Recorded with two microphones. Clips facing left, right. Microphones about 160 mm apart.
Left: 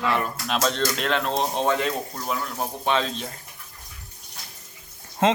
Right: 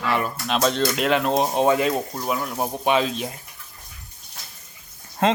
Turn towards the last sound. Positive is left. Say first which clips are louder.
# even
turn(degrees=20)  # may be behind; listen again after turning